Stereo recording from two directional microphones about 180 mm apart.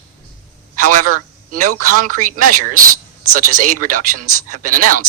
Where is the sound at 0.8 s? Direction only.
50° right (ahead or behind).